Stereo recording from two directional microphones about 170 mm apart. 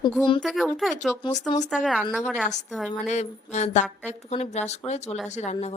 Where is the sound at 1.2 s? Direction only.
25° left (ahead or behind).